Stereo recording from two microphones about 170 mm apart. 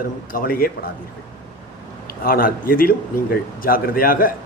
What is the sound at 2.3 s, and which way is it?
A man's voice, 60° left (ahead or behind).